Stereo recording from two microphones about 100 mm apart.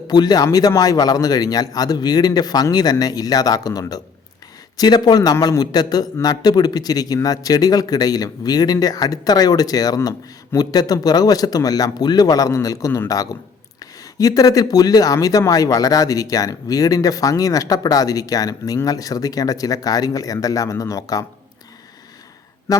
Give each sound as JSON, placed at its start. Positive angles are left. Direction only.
{"t": 0.1, "sound": "speech", "side_deg": 45}
{"t": 14.2, "sound": "speech", "side_deg": 35}
{"t": 22.7, "sound": "speech", "side_deg": 40}